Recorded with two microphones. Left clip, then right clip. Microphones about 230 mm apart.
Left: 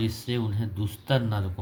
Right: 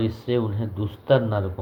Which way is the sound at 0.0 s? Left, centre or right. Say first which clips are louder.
Right 6 dB; left.